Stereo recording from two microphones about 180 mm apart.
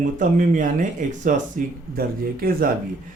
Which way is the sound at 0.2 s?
45° right (ahead or behind).